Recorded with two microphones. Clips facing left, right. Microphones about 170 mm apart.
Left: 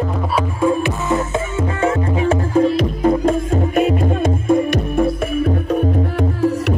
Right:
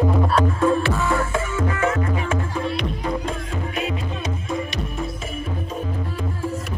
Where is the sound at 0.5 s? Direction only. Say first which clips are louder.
Left 2 dB; 15° left (ahead or behind); by 5.1 s 55° left (ahead or behind).